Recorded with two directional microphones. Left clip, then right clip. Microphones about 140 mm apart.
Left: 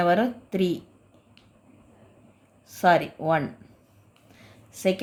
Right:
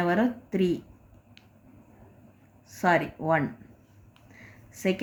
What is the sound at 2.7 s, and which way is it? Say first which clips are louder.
Speech: left 4 dB; 25° left (ahead or behind).